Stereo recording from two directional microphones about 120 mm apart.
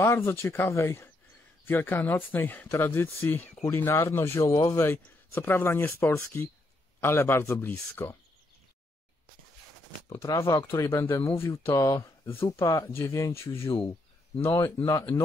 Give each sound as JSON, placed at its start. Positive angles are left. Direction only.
{"t": 0.0, "sound": "a man's voice", "side_deg": 20}
{"t": 10.0, "sound": "a man's voice", "side_deg": 25}